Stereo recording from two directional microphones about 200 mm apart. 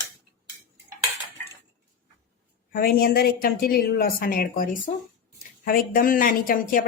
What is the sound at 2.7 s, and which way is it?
A woman's voice, 50° left (ahead or behind).